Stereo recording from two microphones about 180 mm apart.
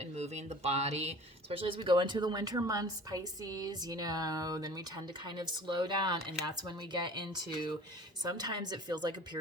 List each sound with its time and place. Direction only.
0.0 s speech: 35° right (ahead or behind)